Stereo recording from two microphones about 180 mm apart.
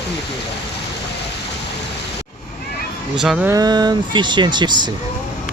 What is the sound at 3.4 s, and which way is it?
Speech, 20° right (ahead or behind).